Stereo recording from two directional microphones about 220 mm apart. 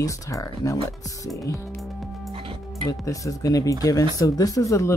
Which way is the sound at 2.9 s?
15° left (ahead or behind).